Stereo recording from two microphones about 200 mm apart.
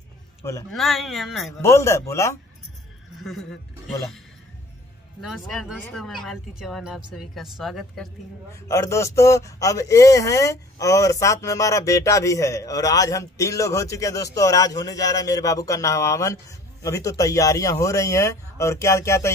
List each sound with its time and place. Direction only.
0.4 s a man's voice: 15° left (ahead or behind)
0.7 s speech: centre (ahead or behind)
1.6 s speech: 15° left (ahead or behind)
3.2 s speech: centre (ahead or behind)
5.2 s speech: centre (ahead or behind)
8.5 s speech: 15° left (ahead or behind)